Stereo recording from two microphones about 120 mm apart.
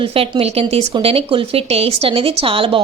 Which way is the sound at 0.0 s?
50° right (ahead or behind).